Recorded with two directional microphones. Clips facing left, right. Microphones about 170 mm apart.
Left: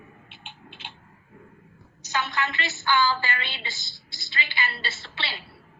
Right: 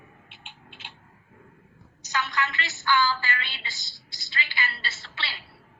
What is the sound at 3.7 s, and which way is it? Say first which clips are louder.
Speech: left 2 dB; 40° right (ahead or behind).